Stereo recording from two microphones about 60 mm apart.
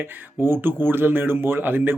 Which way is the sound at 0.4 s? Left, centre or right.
Right.